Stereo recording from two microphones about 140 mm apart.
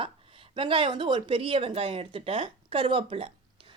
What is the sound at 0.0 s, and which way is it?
Speech, 40° right (ahead or behind).